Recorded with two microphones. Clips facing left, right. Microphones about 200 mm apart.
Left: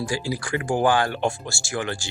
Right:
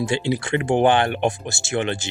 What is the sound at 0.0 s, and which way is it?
Speech, 25° right (ahead or behind).